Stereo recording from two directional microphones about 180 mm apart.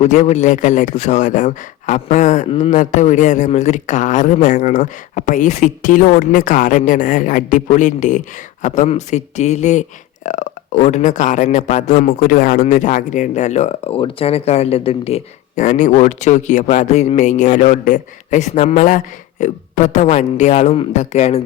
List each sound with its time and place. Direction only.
0.0 s speech: 40° left (ahead or behind)